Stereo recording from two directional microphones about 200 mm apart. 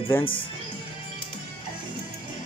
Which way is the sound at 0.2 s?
25° left (ahead or behind).